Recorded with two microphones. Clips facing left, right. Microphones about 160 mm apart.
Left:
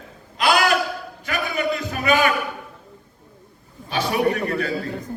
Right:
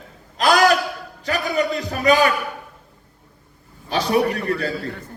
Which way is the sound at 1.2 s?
35° right (ahead or behind).